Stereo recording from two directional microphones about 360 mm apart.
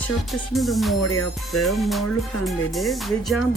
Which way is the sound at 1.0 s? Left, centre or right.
Left.